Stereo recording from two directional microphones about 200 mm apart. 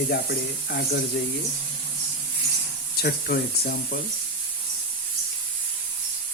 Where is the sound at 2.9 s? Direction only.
50° left (ahead or behind).